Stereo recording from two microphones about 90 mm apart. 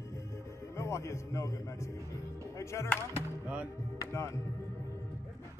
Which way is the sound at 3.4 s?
15° right (ahead or behind).